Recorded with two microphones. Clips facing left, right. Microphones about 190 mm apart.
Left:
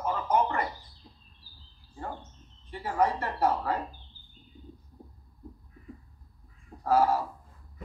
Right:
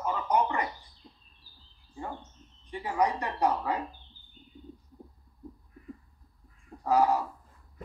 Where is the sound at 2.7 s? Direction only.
15° right (ahead or behind).